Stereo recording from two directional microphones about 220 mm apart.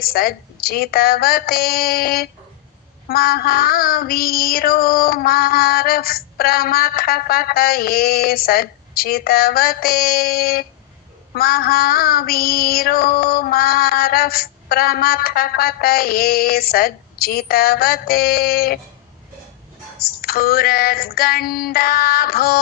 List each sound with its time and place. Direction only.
0.0 s female singing: 45° left (ahead or behind)
20.0 s female singing: 45° left (ahead or behind)